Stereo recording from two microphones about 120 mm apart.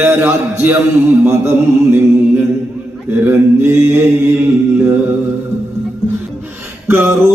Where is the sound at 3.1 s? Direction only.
20° right (ahead or behind).